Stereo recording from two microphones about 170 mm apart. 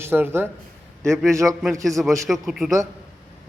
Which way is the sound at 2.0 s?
5° right (ahead or behind).